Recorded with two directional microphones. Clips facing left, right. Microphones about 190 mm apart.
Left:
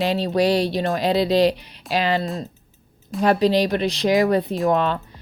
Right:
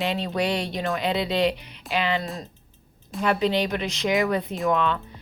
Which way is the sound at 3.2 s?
35° left (ahead or behind).